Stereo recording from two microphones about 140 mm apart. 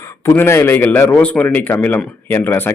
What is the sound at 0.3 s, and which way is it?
A man's voice, 15° left (ahead or behind).